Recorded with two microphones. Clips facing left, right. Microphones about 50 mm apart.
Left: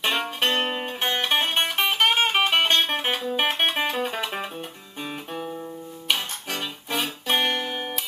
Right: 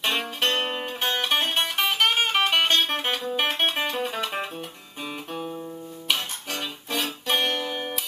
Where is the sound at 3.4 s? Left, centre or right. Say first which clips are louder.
Left 1 dB; centre.